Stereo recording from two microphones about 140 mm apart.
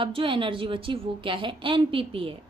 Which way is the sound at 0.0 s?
40° right (ahead or behind).